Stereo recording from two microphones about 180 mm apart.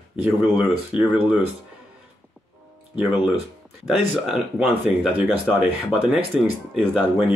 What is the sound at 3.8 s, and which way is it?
Speech, 5° right (ahead or behind).